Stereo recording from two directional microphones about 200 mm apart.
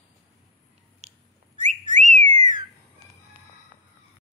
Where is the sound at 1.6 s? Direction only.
35° right (ahead or behind).